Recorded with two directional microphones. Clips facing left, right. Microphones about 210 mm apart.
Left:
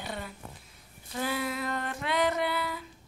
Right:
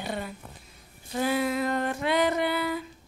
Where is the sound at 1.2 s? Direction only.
20° right (ahead or behind).